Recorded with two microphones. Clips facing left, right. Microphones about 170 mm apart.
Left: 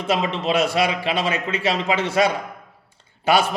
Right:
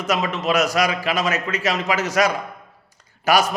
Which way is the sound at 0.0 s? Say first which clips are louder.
Even; 30° left (ahead or behind).